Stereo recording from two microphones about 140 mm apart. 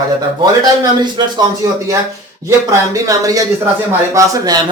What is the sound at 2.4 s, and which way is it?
A man's voice, 20° right (ahead or behind).